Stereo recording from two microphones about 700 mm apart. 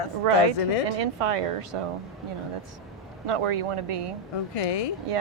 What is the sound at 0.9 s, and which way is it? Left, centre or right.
Speech, right.